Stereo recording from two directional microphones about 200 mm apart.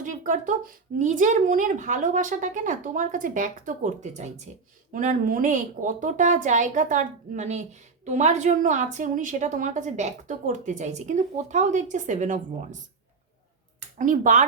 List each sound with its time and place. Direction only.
0.0 s speech: 40° right (ahead or behind)
14.0 s speech: 40° right (ahead or behind)